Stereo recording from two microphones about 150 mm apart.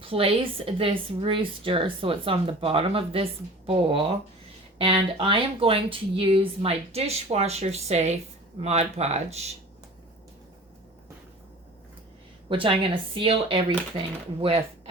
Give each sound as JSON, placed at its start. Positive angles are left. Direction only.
{"t": 0.0, "sound": "speech", "side_deg": -40}
{"t": 12.5, "sound": "speech", "side_deg": -35}